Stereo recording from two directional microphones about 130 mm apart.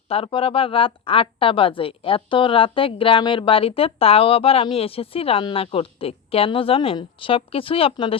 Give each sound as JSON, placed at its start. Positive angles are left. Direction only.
{"t": 0.1, "sound": "a woman's voice", "side_deg": 45}